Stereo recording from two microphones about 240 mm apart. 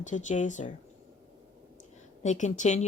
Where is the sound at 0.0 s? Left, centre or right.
Left.